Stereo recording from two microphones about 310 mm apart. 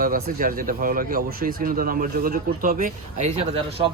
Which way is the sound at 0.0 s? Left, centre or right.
Right.